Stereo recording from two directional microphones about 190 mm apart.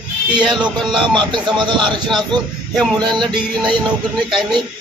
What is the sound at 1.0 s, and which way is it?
A man's voice, 25° right (ahead or behind).